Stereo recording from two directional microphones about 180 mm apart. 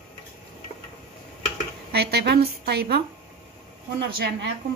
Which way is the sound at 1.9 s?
65° right (ahead or behind).